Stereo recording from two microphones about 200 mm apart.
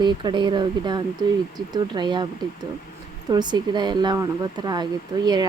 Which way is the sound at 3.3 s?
20° right (ahead or behind).